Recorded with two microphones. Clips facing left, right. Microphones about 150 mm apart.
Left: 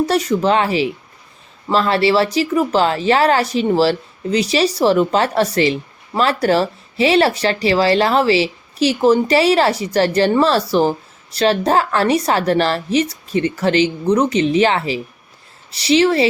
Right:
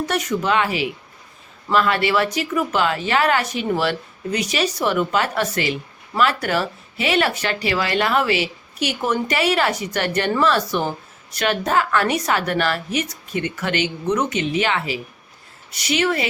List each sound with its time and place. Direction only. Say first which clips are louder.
0.0 s a woman's voice: left 6 dB; 30° left (ahead or behind)